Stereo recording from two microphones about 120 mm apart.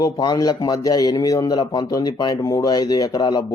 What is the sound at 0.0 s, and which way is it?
Speech, 35° left (ahead or behind).